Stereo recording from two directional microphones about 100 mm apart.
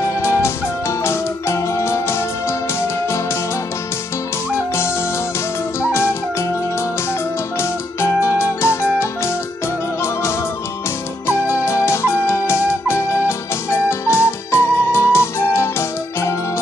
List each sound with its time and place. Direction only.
0.0 s music: 30° left (ahead or behind)
5.8 s music: 25° left (ahead or behind)
7.5 s music: 25° left (ahead or behind)
11.2 s flute: 25° left (ahead or behind)